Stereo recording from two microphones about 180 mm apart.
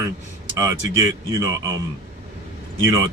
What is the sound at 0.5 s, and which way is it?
Speech, 15° right (ahead or behind).